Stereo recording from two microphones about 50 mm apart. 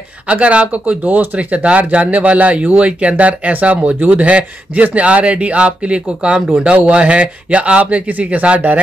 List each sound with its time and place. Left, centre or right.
0.3 s speech: right